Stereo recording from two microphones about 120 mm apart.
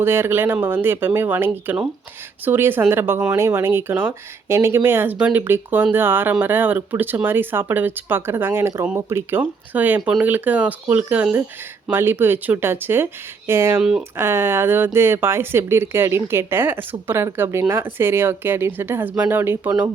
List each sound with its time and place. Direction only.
0.0 s speech: 20° right (ahead or behind)